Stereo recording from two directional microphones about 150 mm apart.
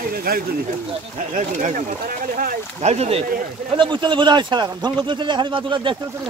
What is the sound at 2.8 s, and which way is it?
Speech, 45° right (ahead or behind).